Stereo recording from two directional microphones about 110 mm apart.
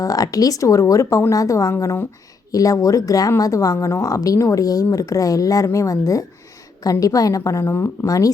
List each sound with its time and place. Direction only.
0.0 s speech: 35° left (ahead or behind)